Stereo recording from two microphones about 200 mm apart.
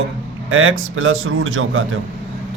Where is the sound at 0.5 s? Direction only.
80° right.